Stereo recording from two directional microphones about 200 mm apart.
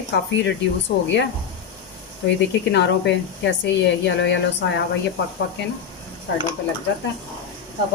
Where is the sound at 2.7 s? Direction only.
60° left (ahead or behind).